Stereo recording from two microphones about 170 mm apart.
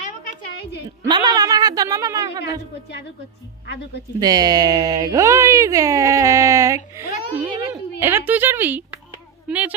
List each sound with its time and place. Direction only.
1.0 s a woman's voice: 25° right (ahead or behind)
4.2 s a woman's voice: 25° right (ahead or behind)